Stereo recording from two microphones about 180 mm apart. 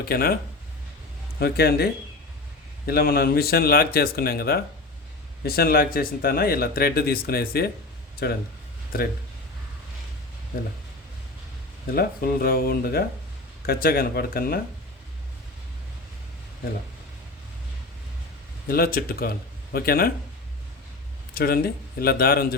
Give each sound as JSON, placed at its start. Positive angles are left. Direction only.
{"t": 0.0, "sound": "speech", "side_deg": 55}
{"t": 1.4, "sound": "speech", "side_deg": 60}
{"t": 11.9, "sound": "speech", "side_deg": 55}
{"t": 18.7, "sound": "speech", "side_deg": 55}
{"t": 21.3, "sound": "speech", "side_deg": 55}